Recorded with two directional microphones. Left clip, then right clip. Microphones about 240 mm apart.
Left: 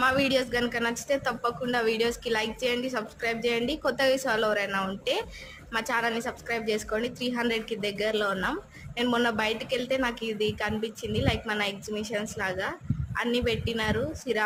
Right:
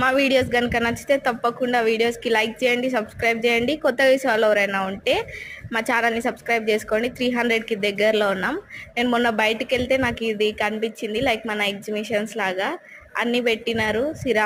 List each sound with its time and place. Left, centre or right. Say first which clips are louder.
0.0 s speech: right 6 dB; centre